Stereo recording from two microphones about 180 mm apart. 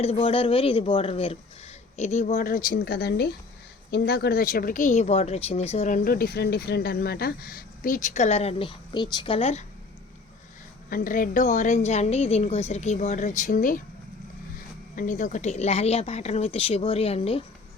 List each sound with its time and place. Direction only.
0.0 s speech: 30° left (ahead or behind)
6.1 s speech: 60° left (ahead or behind); by 9.6 s 35° left (ahead or behind)
10.8 s speech: 50° left (ahead or behind)
14.9 s speech: 45° left (ahead or behind)